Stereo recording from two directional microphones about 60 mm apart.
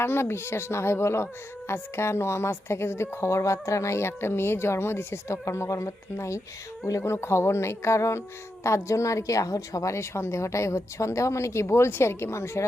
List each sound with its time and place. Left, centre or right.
0.0 s a woman's voice: left